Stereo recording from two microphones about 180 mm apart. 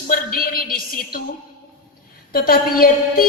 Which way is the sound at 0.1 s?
55° left (ahead or behind).